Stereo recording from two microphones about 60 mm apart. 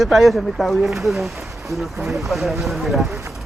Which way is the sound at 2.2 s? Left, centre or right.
Centre.